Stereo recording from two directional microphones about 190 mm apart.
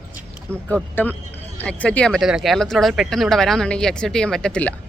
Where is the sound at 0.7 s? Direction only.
10° left (ahead or behind).